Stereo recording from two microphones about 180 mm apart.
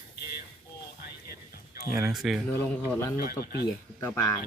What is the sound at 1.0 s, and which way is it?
Music, 60° left (ahead or behind).